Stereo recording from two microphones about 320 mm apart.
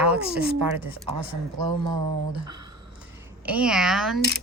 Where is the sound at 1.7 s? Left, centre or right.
Right.